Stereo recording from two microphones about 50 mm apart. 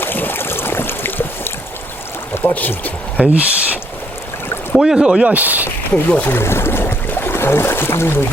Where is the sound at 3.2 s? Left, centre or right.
Right.